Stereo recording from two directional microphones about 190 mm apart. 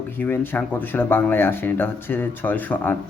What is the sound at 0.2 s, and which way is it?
Speech, 10° left (ahead or behind).